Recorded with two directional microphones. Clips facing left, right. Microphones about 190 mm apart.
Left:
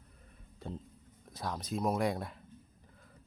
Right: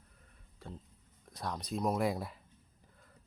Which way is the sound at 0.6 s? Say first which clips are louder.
Left 5 dB; 20° left (ahead or behind).